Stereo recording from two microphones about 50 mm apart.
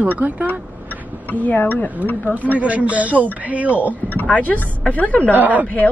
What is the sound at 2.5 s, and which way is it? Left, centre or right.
A woman's voice, right.